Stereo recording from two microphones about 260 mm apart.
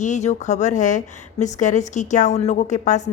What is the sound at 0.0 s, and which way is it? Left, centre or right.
Speech, left.